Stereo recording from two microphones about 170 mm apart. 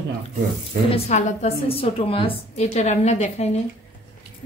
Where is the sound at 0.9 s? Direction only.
40° left (ahead or behind).